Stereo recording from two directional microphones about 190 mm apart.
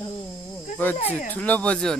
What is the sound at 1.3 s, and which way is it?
Speech, 10° left (ahead or behind).